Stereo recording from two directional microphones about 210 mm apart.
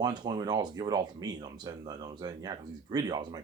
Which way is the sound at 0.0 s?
20° right (ahead or behind).